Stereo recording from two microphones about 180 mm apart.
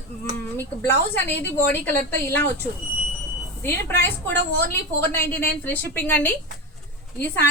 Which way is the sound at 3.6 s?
15° left (ahead or behind).